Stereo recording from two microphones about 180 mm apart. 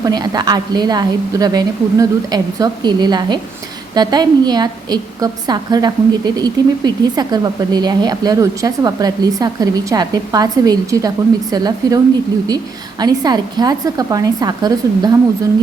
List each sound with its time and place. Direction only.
0.0 s a woman's voice: 20° right (ahead or behind)
13.0 s a woman's voice: 20° right (ahead or behind)